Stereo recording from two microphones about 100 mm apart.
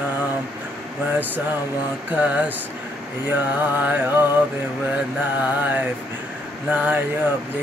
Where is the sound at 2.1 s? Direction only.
15° right (ahead or behind).